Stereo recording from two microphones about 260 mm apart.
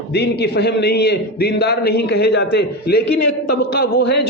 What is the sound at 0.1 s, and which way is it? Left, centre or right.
Speech, left.